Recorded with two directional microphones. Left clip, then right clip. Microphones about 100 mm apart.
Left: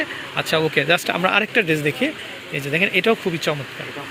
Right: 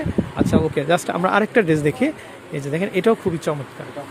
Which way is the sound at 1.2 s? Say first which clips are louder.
Right 1 dB; 60° right (ahead or behind).